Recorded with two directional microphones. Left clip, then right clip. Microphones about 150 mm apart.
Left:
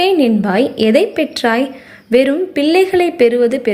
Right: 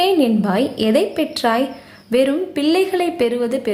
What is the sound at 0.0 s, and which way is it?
A woman's voice, 20° left (ahead or behind).